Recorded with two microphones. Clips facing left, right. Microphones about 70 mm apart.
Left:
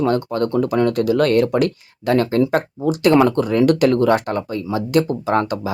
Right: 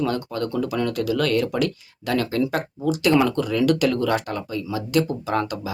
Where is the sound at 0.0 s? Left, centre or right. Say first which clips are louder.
Left 6 dB; left.